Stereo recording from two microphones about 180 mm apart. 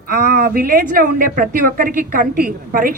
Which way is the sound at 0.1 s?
50° right (ahead or behind).